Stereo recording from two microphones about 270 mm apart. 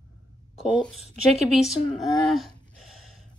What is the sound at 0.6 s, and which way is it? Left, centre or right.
A woman's voice, centre.